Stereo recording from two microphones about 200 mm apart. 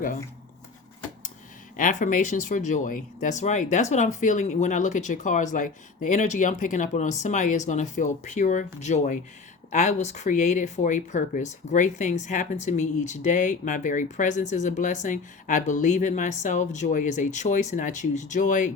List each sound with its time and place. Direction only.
1.7 s speech: 40° left (ahead or behind)